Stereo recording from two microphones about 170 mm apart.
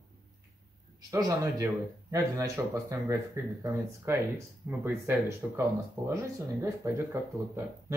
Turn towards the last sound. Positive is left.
turn(degrees=-15)  # may be behind; listen again after turning